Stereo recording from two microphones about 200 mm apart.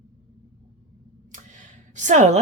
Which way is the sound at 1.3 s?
40° right (ahead or behind).